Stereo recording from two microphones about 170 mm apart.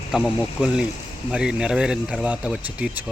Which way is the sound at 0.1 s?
5° right (ahead or behind).